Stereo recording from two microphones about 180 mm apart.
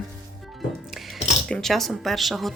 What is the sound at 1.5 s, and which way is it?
Speech, 5° left (ahead or behind).